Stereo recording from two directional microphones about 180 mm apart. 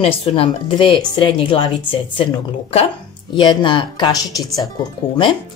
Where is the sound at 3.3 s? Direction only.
25° left (ahead or behind).